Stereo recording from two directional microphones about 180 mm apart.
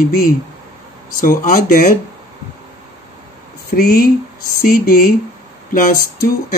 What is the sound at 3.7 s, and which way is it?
Speech, 60° left (ahead or behind).